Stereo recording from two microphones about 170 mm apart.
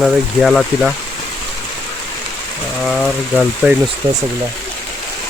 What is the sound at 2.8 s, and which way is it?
Speech, centre (ahead or behind).